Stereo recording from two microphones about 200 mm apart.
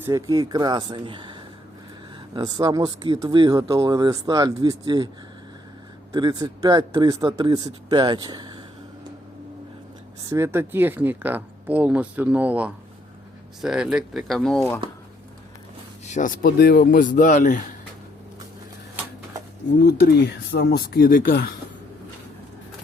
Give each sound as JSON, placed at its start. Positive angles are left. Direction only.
{"t": 0.0, "sound": "speech", "side_deg": -20}
{"t": 6.1, "sound": "speech", "side_deg": -20}
{"t": 10.2, "sound": "speech", "side_deg": -15}
{"t": 16.0, "sound": "speech", "side_deg": 40}
{"t": 19.8, "sound": "speech", "side_deg": 55}